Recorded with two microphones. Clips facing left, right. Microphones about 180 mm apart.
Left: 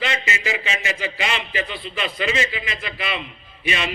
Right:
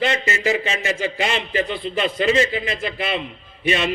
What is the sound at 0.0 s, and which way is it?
A man's voice, 50° right (ahead or behind).